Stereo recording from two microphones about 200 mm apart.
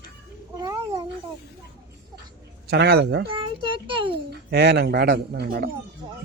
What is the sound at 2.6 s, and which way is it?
Speech, 55° right (ahead or behind).